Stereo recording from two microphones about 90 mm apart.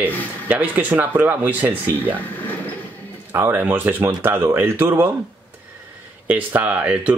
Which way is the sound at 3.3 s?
25° right (ahead or behind).